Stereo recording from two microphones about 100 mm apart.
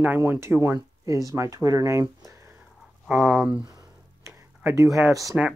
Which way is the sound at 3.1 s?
5° right (ahead or behind).